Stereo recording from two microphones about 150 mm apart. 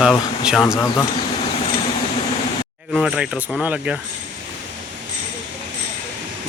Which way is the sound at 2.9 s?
5° right (ahead or behind).